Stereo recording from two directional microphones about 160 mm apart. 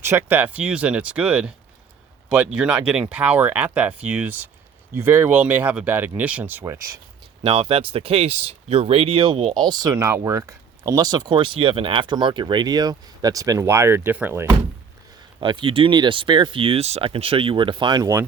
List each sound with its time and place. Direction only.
0.0 s speech: 15° right (ahead or behind)
7.4 s speech: 35° right (ahead or behind); by 14.5 s 10° right (ahead or behind)
15.4 s speech: 30° right (ahead or behind)